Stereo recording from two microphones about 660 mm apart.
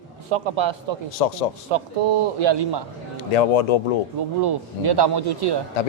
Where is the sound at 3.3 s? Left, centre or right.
Left.